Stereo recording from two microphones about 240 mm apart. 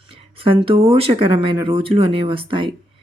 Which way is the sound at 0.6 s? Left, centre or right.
Right.